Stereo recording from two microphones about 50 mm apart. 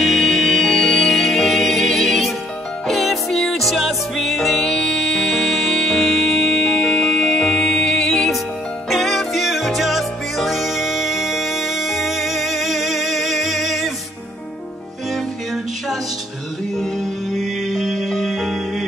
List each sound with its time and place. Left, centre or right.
0.0 s music: centre
15.1 s music: centre